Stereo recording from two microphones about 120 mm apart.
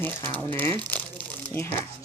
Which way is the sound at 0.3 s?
20° left (ahead or behind).